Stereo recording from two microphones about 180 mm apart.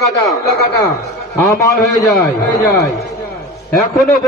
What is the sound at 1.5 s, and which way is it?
Speech, 20° left (ahead or behind).